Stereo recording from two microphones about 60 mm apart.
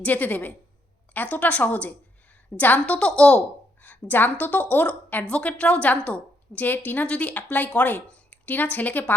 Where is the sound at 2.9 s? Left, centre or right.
Centre.